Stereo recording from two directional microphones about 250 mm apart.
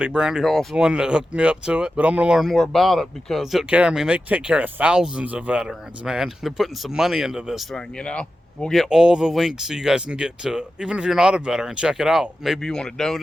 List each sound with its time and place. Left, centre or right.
0.0 s speech: centre